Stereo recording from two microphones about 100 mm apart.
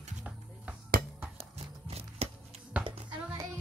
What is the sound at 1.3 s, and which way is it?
Music, 90° right.